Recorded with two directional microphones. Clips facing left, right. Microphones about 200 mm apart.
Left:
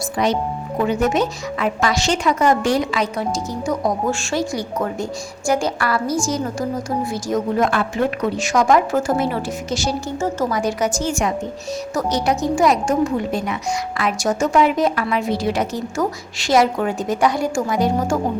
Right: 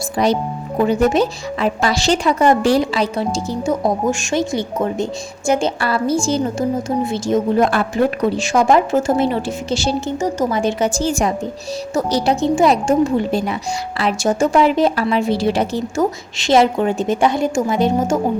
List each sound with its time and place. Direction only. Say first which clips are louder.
0.2 s a woman's voice: right 3 dB; 35° right (ahead or behind)
10.2 s speech: right 2 dB; 15° right (ahead or behind)
10.5 s a woman's voice: right 2 dB; 25° right (ahead or behind)